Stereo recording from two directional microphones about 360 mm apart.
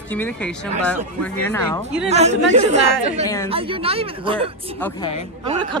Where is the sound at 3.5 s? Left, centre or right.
Centre.